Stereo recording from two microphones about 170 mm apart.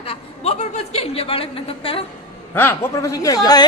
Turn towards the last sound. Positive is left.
turn(degrees=20)  # may be behind; listen again after turning